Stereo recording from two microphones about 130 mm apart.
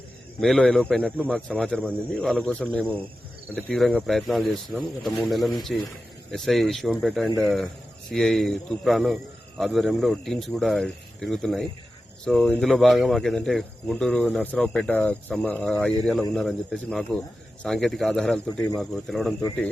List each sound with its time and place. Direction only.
0.3 s speech: centre (ahead or behind)